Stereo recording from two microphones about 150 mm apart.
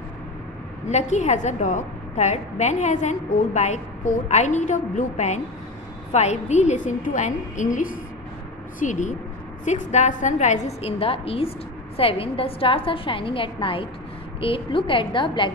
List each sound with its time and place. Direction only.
0.8 s a woman's voice: 50° left (ahead or behind); by 15.5 s 35° left (ahead or behind)